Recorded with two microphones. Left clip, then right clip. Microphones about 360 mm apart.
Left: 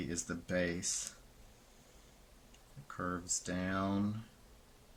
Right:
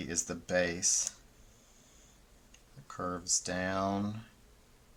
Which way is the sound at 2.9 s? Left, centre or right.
Centre.